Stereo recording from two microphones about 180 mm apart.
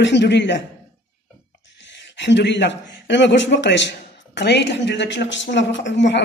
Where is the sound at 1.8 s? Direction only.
80° left.